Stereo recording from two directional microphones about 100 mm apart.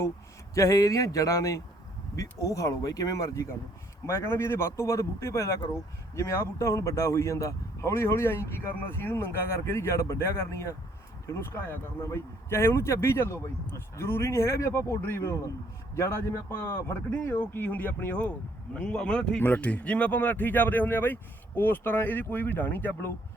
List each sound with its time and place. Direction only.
0.5 s speech: 30° left (ahead or behind)
16.5 s speech: 20° left (ahead or behind)